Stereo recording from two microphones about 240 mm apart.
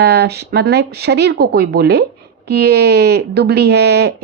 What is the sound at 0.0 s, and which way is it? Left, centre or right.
Speech, right.